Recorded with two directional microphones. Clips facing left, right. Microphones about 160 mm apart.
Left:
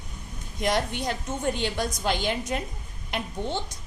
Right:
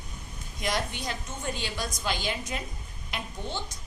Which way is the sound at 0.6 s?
60° left (ahead or behind).